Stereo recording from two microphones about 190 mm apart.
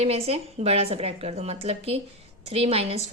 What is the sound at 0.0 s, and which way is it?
Speech, 30° right (ahead or behind).